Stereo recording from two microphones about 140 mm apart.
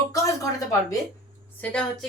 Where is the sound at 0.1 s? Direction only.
25° left (ahead or behind).